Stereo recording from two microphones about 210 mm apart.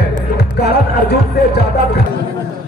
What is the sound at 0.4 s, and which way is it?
Music, 50° left (ahead or behind).